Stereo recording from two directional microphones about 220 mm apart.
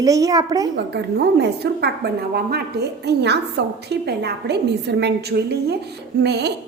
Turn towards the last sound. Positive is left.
turn(degrees=-50)  # may be behind; listen again after turning